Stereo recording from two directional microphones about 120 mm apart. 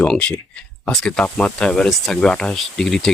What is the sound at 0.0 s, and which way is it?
Speech, 10° left (ahead or behind).